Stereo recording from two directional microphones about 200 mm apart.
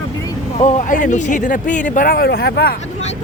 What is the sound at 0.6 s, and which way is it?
Speech, 35° left (ahead or behind).